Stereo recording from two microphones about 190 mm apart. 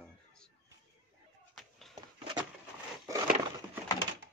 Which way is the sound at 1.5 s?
Centre (ahead or behind).